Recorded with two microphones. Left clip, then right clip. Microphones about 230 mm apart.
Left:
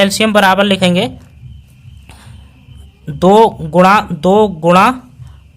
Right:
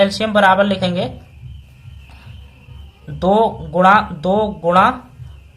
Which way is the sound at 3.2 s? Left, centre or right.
Left.